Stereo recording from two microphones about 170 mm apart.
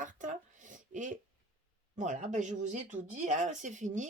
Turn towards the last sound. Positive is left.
turn(degrees=-45)  # may be behind; listen again after turning